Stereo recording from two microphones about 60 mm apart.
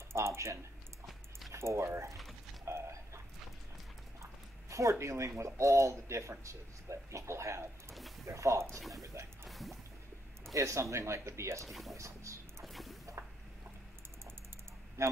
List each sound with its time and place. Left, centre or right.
0.1 s typing: right
1.5 s speech: right
2.6 s chicken: right
4.2 s speech: right
9.5 s music: centre
10.5 s speech: right
11.6 s speech: centre
12.0 s speech: right
12.6 s a sound: centre
15.0 s speech: right